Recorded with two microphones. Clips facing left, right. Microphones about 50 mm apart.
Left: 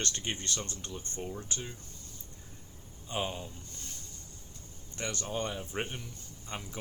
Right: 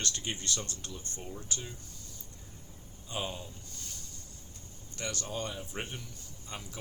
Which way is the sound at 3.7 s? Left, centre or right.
Left.